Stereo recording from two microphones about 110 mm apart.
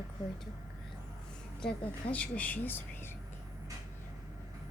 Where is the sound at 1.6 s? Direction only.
10° left (ahead or behind).